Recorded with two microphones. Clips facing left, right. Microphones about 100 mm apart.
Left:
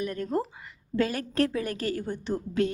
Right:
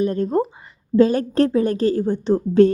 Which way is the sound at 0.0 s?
30° right (ahead or behind).